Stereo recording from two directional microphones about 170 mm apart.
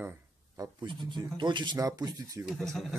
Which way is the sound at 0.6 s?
25° right (ahead or behind).